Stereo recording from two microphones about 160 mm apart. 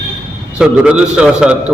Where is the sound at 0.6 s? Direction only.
5° right (ahead or behind).